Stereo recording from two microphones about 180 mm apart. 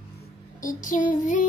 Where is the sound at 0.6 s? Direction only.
45° left (ahead or behind).